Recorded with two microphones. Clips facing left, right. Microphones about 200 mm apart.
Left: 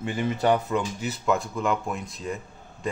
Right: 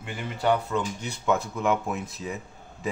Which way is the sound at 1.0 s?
Centre (ahead or behind).